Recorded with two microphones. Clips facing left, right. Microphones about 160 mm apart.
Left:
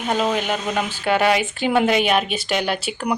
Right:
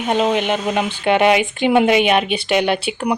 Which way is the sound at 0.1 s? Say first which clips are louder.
Right 4 dB; 20° right (ahead or behind).